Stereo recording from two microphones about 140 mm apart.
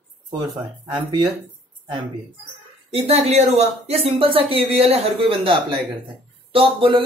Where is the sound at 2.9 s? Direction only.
45° right (ahead or behind).